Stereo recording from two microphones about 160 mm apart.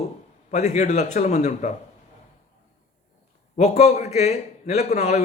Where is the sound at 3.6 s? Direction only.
45° left (ahead or behind).